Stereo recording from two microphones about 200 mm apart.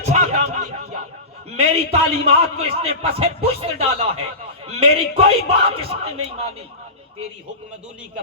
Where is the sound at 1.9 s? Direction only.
30° right (ahead or behind).